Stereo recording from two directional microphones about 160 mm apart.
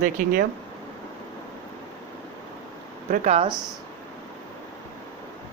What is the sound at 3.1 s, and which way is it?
Speech, 50° right (ahead or behind).